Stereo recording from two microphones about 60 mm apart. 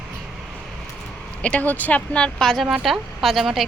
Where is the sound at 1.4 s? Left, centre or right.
Left.